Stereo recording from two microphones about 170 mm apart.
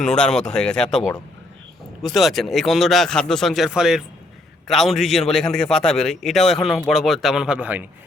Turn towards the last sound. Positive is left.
turn(degrees=-10)  # may be behind; listen again after turning